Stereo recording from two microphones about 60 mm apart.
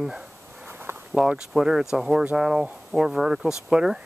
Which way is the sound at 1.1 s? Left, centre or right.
Centre.